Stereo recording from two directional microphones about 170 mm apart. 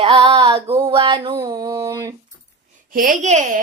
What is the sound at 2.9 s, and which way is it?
Speech, 55° right (ahead or behind).